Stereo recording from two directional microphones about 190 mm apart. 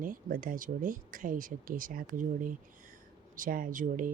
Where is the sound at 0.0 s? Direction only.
45° right (ahead or behind).